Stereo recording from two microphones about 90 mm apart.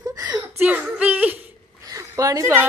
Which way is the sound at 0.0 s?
45° right (ahead or behind).